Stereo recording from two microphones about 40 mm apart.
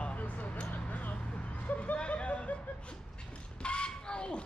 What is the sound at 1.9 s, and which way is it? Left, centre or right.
Speech, left.